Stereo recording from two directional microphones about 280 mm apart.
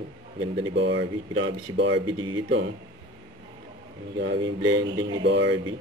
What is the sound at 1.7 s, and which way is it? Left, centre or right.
Speech, right.